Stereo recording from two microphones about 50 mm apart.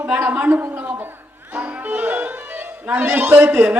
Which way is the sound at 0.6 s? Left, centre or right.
Right.